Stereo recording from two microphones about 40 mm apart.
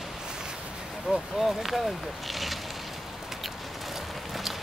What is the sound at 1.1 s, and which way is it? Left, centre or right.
Speech, centre.